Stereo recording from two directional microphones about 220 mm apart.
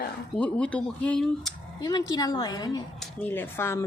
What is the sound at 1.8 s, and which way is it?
Speech, 15° left (ahead or behind).